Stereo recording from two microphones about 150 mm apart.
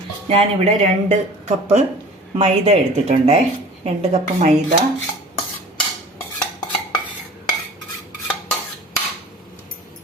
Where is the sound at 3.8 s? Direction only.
55° right (ahead or behind).